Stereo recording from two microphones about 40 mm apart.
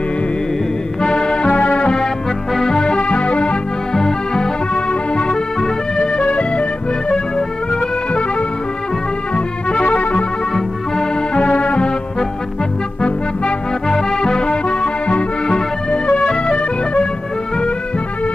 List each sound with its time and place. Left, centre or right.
1.0 s music: left
2.5 s music: centre
3.9 s music: centre
8.1 s accordion: left
9.3 s music: left
11.3 s music: left
13.0 s music: left